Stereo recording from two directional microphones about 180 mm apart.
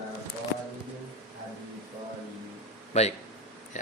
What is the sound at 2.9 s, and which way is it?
Speech, 35° left (ahead or behind).